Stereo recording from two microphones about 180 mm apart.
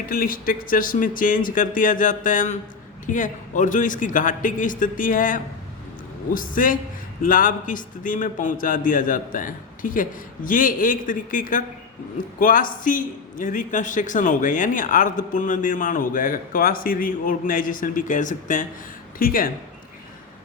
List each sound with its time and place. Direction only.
0.0 s a man's voice: 50° left (ahead or behind)